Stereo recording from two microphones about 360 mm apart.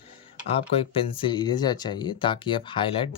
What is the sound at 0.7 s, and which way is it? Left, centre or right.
Speech, centre.